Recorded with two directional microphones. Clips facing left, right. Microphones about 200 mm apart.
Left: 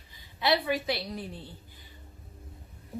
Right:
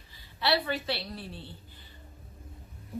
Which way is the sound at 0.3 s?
15° left (ahead or behind).